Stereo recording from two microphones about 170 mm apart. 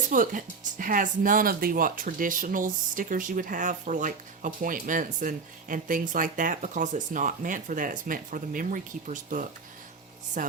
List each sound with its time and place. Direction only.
0.1 s speech: 50° right (ahead or behind)